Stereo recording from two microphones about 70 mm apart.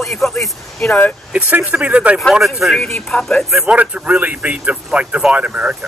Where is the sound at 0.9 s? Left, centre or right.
Left.